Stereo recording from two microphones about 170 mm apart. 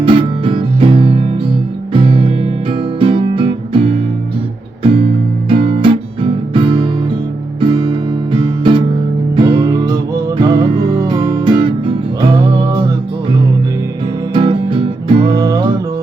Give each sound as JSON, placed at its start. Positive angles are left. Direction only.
{"t": 0.0, "sound": "music", "side_deg": -30}
{"t": 14.3, "sound": "music", "side_deg": -30}
{"t": 15.3, "sound": "music", "side_deg": -20}